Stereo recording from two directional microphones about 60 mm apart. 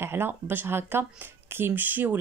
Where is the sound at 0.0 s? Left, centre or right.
Right.